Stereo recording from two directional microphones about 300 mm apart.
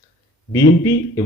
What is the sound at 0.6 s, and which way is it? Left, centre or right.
Speech, left.